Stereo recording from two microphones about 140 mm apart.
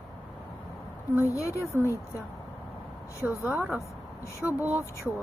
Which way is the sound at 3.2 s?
15° right (ahead or behind).